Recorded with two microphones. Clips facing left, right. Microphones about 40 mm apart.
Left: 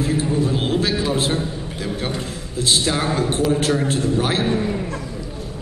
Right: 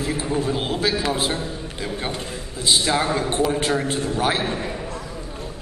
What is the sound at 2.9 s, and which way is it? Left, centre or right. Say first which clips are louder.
Speech: even; right.